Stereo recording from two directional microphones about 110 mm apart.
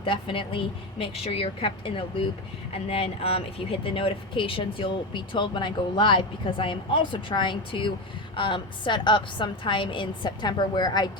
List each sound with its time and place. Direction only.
0.0 s speech: 50° left (ahead or behind)